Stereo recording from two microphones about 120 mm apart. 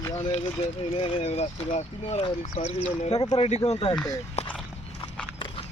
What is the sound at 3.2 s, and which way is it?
Speech, 45° left (ahead or behind).